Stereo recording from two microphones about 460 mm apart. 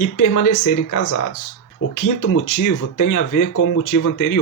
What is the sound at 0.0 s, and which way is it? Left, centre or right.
Speech, left.